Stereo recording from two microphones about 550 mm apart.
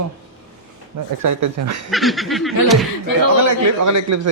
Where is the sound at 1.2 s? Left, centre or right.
Right.